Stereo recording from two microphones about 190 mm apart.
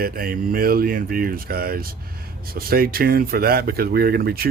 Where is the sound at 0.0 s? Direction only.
50° right (ahead or behind).